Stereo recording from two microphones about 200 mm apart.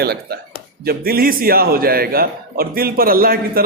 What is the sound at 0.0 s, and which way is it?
A man's voice, 50° right (ahead or behind).